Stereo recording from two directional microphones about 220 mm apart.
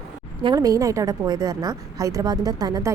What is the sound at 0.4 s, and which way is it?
A woman's voice, 15° right (ahead or behind).